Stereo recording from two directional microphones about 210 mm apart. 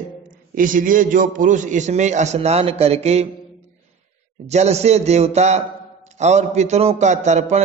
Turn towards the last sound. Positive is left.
turn(degrees=-35)  # may be behind; listen again after turning